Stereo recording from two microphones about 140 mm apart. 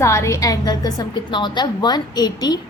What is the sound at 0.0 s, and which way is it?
A woman's voice, 20° left (ahead or behind).